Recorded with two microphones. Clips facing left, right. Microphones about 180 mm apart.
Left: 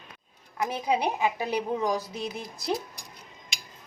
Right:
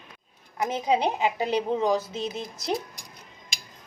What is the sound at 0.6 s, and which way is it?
A woman's voice, 20° right (ahead or behind).